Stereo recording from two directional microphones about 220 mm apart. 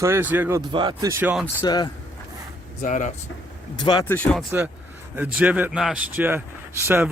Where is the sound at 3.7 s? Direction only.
20° left (ahead or behind).